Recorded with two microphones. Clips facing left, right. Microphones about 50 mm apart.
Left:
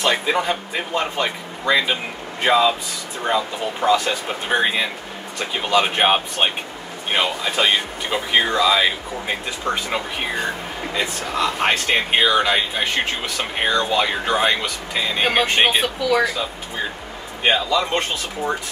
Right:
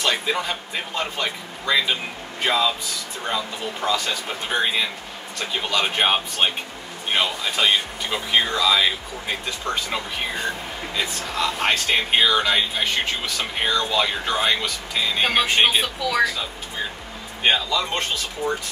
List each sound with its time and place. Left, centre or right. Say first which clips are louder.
0.1 s speech: left 4 dB; centre
17.6 s speech: left 4 dB; centre